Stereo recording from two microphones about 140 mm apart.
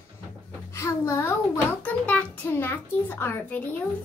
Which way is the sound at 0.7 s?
20° left (ahead or behind).